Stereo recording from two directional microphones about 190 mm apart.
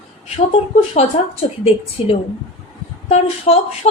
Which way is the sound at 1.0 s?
30° left (ahead or behind).